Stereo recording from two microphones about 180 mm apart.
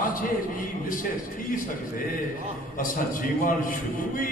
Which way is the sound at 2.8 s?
50° left (ahead or behind).